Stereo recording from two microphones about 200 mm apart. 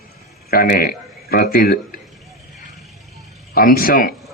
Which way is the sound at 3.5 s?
45° left (ahead or behind).